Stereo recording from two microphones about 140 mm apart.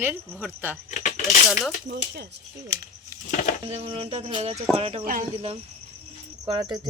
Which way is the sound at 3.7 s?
45° right (ahead or behind).